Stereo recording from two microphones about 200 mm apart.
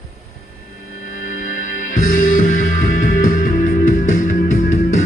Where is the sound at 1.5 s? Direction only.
40° left (ahead or behind).